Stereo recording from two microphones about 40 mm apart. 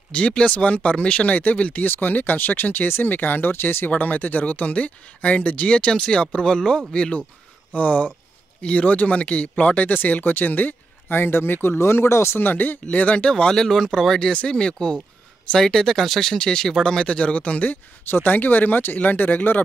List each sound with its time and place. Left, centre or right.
0.1 s speech: left
1.8 s speech: left
4.0 s speech: left
7.7 s speech: left
10.2 s speech: left
12.4 s speech: left
12.9 s speech: left
13.3 s speech: centre
14.3 s speech: left
15.6 s speech: centre
16.3 s speech: centre; by 17.6 s left
17.6 s speech: left